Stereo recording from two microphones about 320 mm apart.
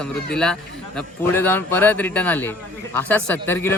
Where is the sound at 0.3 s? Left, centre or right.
Centre.